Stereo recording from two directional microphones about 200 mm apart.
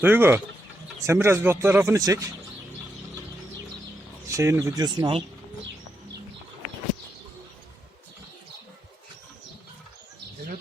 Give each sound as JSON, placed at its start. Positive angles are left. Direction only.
{"t": 0.0, "sound": "speech", "side_deg": -10}
{"t": 4.3, "sound": "speech", "side_deg": -15}